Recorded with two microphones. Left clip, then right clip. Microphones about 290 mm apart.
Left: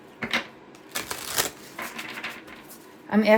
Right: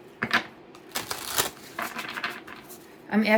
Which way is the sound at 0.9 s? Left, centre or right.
Centre.